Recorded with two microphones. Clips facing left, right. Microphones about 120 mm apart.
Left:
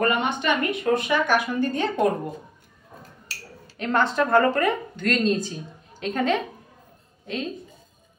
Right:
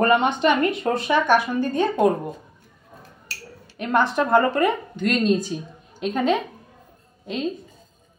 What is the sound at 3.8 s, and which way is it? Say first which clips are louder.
Speech: right 2 dB; 15° right (ahead or behind).